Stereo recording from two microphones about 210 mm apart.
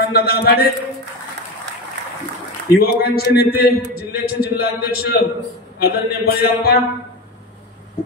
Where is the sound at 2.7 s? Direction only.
45° left (ahead or behind).